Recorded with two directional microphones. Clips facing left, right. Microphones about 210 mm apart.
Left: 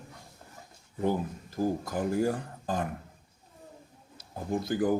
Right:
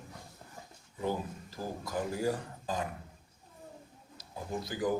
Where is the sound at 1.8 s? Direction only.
50° left (ahead or behind).